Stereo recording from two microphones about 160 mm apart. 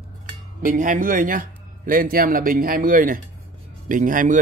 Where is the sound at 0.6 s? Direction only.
55° right (ahead or behind).